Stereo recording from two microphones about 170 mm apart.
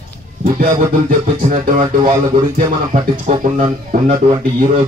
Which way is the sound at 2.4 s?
50° right (ahead or behind).